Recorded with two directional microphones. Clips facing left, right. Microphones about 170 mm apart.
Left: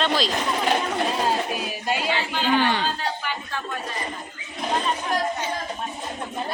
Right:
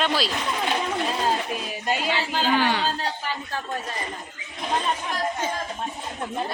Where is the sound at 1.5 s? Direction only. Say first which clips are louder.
Even; 5° left (ahead or behind).